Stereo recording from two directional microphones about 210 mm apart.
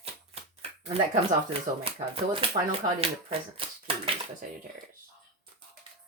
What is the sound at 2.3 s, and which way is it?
Speech, 25° right (ahead or behind).